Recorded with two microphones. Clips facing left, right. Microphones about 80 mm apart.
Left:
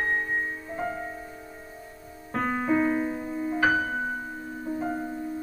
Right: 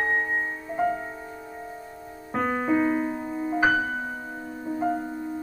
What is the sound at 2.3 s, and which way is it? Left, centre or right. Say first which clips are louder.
Music: right 1 dB; centre.